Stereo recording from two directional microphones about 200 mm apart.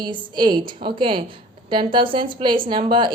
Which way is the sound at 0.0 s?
20° right (ahead or behind).